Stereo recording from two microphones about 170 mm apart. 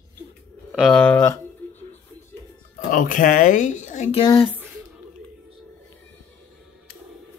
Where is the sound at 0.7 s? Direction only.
5° right (ahead or behind).